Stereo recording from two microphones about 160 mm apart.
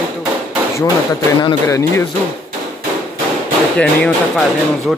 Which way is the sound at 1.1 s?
25° left (ahead or behind).